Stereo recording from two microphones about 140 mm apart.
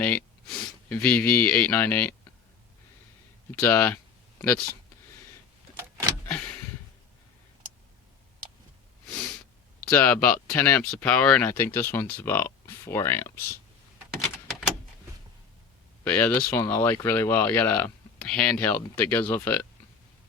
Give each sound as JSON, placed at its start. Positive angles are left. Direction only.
{"t": 0.0, "sound": "sniff", "side_deg": 10}
{"t": 1.0, "sound": "speech", "side_deg": 10}
{"t": 3.5, "sound": "speech", "side_deg": 10}
{"t": 5.7, "sound": "vehicle", "side_deg": -15}
{"t": 6.2, "sound": "a sound", "side_deg": 10}
{"t": 9.9, "sound": "speech", "side_deg": 10}
{"t": 16.0, "sound": "speech", "side_deg": 10}